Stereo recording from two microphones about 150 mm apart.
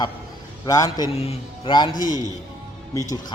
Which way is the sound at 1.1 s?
40° left (ahead or behind).